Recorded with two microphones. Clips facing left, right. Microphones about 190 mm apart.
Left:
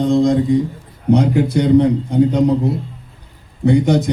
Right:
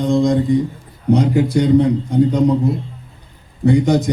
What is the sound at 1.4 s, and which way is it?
A man's voice, 60° left (ahead or behind).